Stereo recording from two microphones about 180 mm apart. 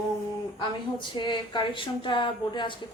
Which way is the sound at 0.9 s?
25° left (ahead or behind).